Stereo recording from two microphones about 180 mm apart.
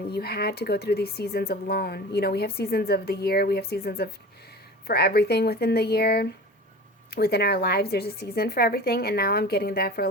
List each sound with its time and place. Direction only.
0.1 s speech: 60° left (ahead or behind)